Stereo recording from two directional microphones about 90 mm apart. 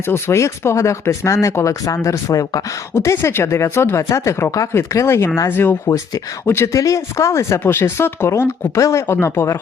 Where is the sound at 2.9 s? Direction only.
30° left (ahead or behind).